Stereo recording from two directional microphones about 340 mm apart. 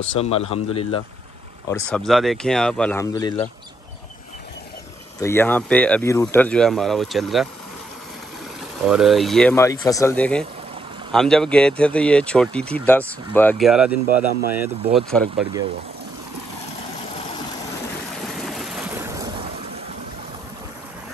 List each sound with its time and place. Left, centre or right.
0.2 s speech: centre
1.8 s speech: centre
5.2 s speech: centre
8.8 s speech: centre
18.2 s waves: centre